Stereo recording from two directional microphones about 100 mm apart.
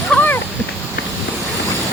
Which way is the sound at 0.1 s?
10° left (ahead or behind).